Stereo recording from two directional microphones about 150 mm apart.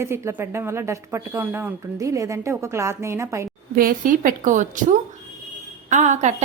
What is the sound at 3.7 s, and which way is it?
A woman's voice, 65° right (ahead or behind).